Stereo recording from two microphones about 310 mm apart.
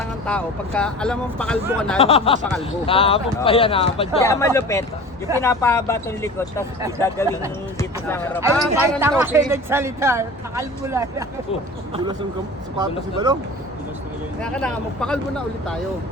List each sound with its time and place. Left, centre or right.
0.3 s speech: centre
2.0 s speech: centre
7.8 s speech: centre
12.8 s speech: centre
14.4 s speech: centre